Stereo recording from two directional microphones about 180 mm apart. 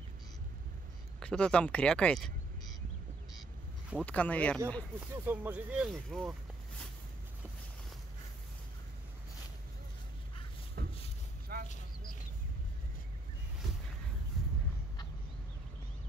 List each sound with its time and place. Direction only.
1.2 s speech: 5° left (ahead or behind)
4.0 s speech: 10° left (ahead or behind)
5.0 s speech: 10° right (ahead or behind)
10.8 s a sound: 55° right (ahead or behind)